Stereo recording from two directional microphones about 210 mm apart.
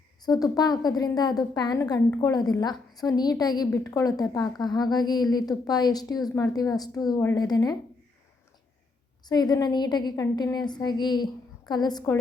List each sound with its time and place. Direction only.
0.2 s a woman's voice: 20° left (ahead or behind)
9.2 s a woman's voice: 20° left (ahead or behind)